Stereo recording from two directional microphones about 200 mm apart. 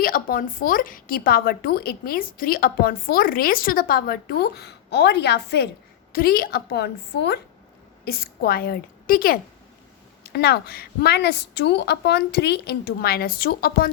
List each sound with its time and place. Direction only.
0.0 s a woman's voice: 45° left (ahead or behind)